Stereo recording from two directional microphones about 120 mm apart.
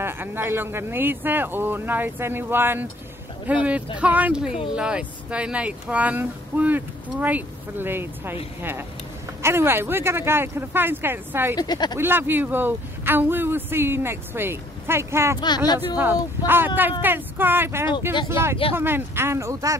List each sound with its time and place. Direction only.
0.0 s speech: 20° right (ahead or behind)
9.4 s speech: 20° right (ahead or behind)
11.5 s speech: 35° left (ahead or behind)
12.0 s speech: 20° right (ahead or behind)
15.4 s speech: 35° left (ahead or behind)
16.4 s speech: 15° right (ahead or behind)